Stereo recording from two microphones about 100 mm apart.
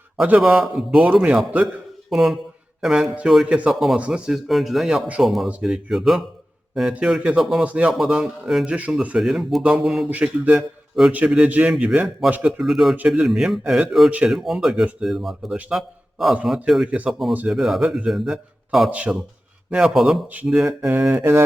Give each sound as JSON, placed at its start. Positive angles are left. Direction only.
{"t": 0.2, "sound": "a man's voice", "side_deg": -10}
{"t": 7.9, "sound": "a man's voice", "side_deg": -5}
{"t": 10.1, "sound": "speech", "side_deg": -15}
{"t": 11.0, "sound": "a man's voice", "side_deg": 0}
{"t": 18.9, "sound": "speech", "side_deg": -15}
{"t": 19.7, "sound": "a man's voice", "side_deg": -5}
{"t": 20.2, "sound": "speech", "side_deg": -15}
{"t": 20.6, "sound": "a man's voice", "side_deg": -5}
{"t": 20.9, "sound": "speech", "side_deg": -15}